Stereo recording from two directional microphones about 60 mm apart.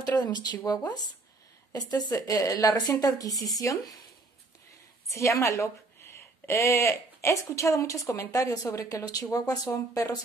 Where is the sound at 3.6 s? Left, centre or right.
Left.